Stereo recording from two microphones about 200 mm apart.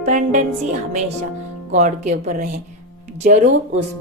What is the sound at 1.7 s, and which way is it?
Speech, 35° right (ahead or behind).